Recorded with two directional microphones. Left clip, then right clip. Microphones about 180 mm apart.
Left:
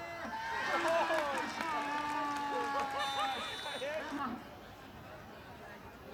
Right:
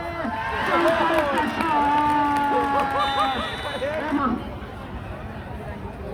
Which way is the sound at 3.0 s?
30° left (ahead or behind).